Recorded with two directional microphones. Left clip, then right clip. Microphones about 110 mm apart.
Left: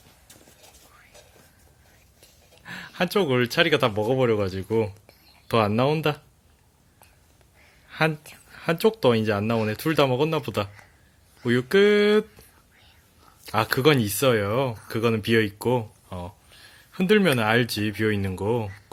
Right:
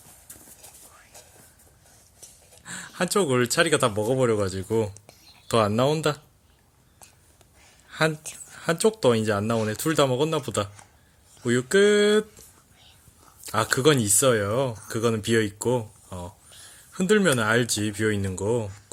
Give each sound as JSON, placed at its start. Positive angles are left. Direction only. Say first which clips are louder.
{"t": 2.9, "sound": "speech", "louder": "even", "side_deg": 20}
{"t": 7.9, "sound": "a sound", "louder": "even", "side_deg": 20}
{"t": 8.5, "sound": "speech", "louder": "left 1 dB", "side_deg": 20}